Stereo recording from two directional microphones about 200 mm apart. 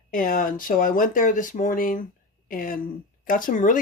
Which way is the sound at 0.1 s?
45° left (ahead or behind).